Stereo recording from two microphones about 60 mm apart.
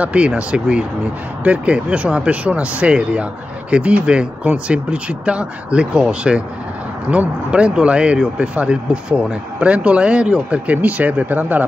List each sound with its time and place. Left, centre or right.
0.0 s speech: right